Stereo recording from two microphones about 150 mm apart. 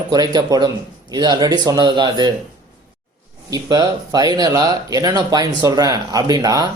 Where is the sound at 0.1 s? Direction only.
25° right (ahead or behind).